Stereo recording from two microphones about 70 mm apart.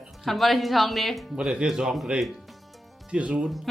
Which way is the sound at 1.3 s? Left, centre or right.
Centre.